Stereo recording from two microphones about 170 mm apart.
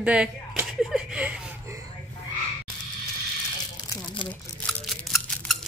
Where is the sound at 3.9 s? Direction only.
25° left (ahead or behind).